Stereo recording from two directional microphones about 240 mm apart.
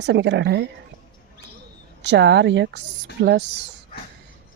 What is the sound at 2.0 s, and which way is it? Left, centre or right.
Speech, right.